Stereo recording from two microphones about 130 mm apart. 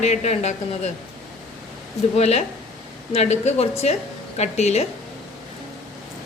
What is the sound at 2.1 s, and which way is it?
A woman's voice, 55° left (ahead or behind).